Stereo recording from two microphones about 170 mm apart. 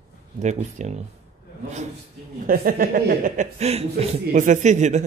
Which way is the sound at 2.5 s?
55° right (ahead or behind).